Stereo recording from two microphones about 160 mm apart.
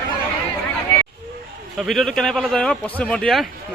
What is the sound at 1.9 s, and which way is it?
Speech, centre (ahead or behind).